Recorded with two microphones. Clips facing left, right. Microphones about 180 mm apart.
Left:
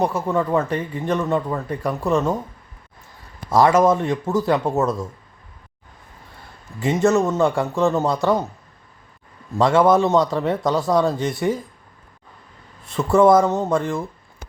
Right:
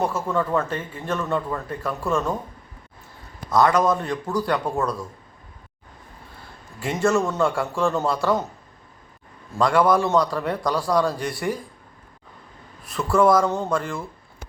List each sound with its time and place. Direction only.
0.0 s speech: 15° left (ahead or behind)
3.5 s a man's voice: 25° left (ahead or behind)
6.8 s a man's voice: 20° left (ahead or behind)
9.6 s a man's voice: 25° left (ahead or behind)
12.8 s a man's voice: 25° left (ahead or behind)